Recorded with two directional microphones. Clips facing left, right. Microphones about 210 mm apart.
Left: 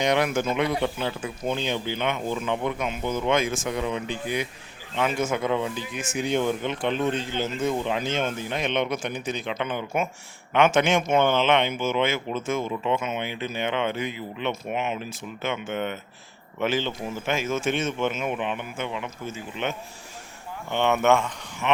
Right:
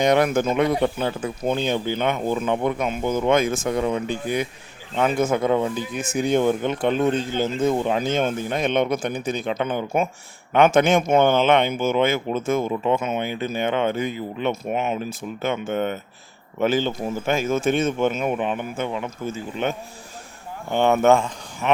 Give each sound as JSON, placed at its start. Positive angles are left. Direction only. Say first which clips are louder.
{"t": 0.0, "sound": "speech", "louder": "right 5 dB", "side_deg": -45}
{"t": 20.7, "sound": "speech", "louder": "right 4 dB", "side_deg": -40}